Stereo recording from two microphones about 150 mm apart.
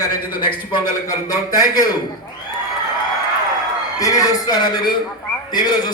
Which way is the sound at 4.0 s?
25° left (ahead or behind).